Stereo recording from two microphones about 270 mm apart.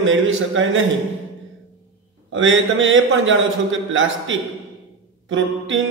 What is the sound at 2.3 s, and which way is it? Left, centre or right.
Speech, right.